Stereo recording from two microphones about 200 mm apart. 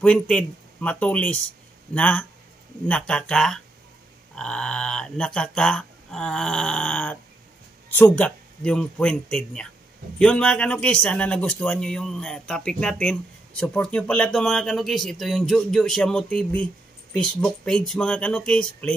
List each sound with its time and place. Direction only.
0.0 s a man's voice: 5° left (ahead or behind)